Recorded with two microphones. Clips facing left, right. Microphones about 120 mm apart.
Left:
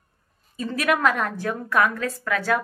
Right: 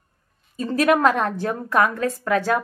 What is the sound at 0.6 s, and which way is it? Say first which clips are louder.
Speech: right 5 dB; 30° right (ahead or behind).